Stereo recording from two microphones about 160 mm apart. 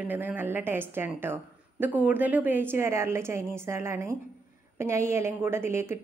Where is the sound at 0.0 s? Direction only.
10° right (ahead or behind).